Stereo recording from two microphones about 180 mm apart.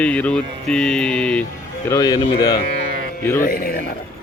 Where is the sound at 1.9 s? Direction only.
20° left (ahead or behind).